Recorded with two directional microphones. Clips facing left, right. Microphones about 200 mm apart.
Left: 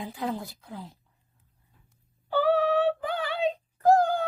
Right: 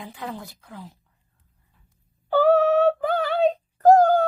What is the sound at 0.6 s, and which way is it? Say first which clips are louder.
Speech: even; centre (ahead or behind).